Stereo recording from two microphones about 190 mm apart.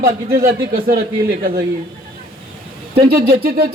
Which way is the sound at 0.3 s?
50° right (ahead or behind).